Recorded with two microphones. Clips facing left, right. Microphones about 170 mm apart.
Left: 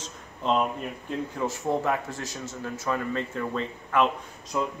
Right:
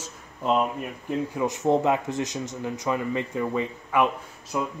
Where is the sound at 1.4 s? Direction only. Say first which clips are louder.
Right 5 dB; 20° right (ahead or behind).